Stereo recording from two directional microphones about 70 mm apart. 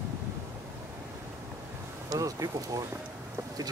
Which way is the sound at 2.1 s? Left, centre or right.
Right.